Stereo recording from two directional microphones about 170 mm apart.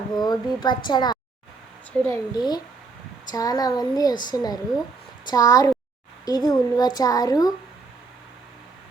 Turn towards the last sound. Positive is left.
turn(degrees=20)  # may be behind; listen again after turning